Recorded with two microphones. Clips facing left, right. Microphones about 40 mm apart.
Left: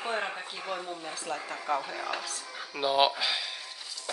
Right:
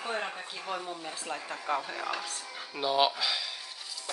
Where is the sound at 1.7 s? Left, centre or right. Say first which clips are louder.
Even; centre.